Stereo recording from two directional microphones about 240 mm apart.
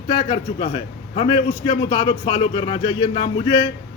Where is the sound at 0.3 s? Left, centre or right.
Left.